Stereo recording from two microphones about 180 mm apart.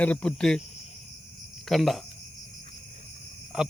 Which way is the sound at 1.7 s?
Centre (ahead or behind).